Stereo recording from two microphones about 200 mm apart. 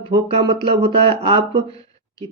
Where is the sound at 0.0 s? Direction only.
25° right (ahead or behind).